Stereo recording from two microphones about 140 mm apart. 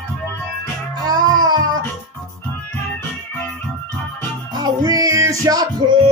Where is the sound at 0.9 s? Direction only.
25° right (ahead or behind).